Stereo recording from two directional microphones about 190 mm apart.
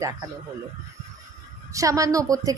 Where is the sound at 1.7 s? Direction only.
15° right (ahead or behind).